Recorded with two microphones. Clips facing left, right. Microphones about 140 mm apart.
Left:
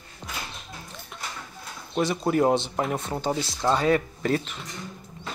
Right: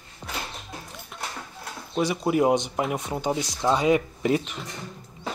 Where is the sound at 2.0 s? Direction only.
10° right (ahead or behind).